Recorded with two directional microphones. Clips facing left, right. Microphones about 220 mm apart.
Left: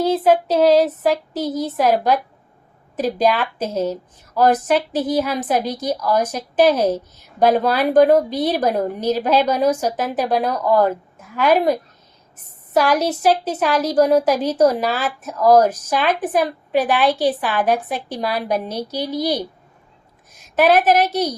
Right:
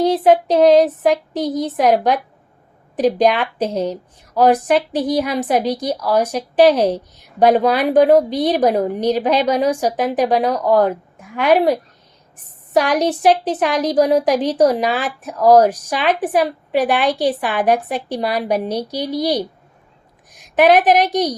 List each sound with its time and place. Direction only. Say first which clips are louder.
0.0 s a woman's voice: right 2 dB; 15° right (ahead or behind)
2.9 s a woman's voice: right 3 dB; 15° right (ahead or behind)
13.0 s a woman's voice: right 3 dB; 15° right (ahead or behind)